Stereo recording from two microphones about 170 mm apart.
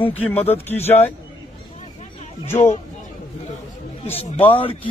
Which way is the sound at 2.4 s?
40° left (ahead or behind).